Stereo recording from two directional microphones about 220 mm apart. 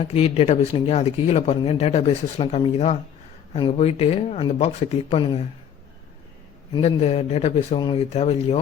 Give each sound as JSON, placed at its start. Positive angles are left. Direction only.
{"t": 0.0, "sound": "speech", "side_deg": 25}
{"t": 6.7, "sound": "speech", "side_deg": 30}